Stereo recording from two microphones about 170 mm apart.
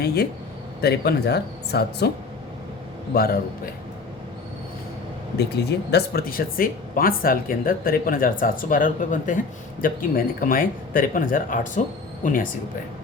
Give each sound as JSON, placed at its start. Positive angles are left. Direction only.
{"t": 0.0, "sound": "speech", "side_deg": 70}
{"t": 5.4, "sound": "speech", "side_deg": 75}